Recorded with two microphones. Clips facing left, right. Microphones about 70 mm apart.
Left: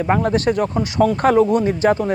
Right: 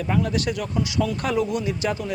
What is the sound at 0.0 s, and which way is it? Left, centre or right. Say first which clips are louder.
Speech: left 7 dB; left.